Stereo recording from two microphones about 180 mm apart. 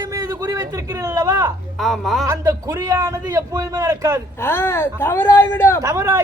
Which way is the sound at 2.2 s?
15° right (ahead or behind).